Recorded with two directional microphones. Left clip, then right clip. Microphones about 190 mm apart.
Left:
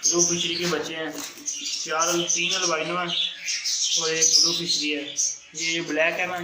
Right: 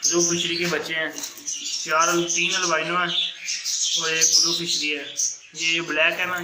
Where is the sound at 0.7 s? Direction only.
15° right (ahead or behind); by 6.4 s 5° left (ahead or behind).